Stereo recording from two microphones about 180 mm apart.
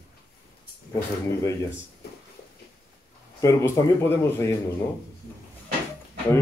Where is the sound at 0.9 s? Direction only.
15° left (ahead or behind).